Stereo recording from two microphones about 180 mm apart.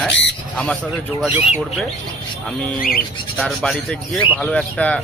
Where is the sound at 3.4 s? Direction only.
Centre (ahead or behind).